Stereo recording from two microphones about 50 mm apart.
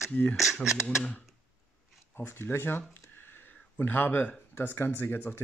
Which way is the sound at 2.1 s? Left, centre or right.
Left.